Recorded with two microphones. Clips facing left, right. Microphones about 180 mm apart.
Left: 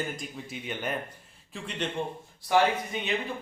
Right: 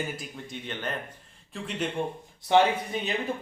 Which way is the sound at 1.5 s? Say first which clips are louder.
Right 2 dB; centre (ahead or behind).